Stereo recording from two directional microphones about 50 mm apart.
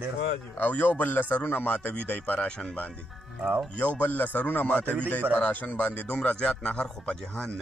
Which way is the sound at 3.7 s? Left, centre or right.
Left.